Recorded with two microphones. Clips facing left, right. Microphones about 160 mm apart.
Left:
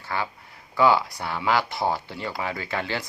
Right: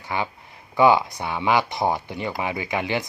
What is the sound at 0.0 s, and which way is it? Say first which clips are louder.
Speech: right 2 dB; 20° right (ahead or behind).